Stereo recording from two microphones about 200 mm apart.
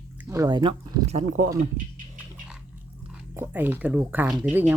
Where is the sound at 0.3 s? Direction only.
15° right (ahead or behind); by 1.5 s 35° right (ahead or behind).